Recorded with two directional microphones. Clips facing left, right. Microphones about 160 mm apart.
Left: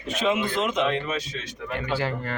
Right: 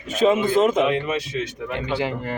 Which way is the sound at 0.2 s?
45° right (ahead or behind).